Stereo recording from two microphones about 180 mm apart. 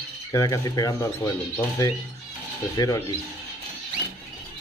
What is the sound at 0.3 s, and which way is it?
Speech, 20° left (ahead or behind).